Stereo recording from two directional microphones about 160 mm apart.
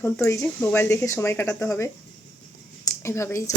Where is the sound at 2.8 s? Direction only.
15° left (ahead or behind).